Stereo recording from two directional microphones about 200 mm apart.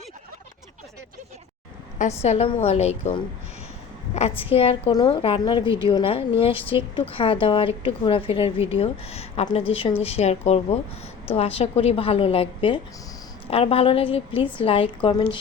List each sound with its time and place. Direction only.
2.2 s a woman's voice: 30° left (ahead or behind)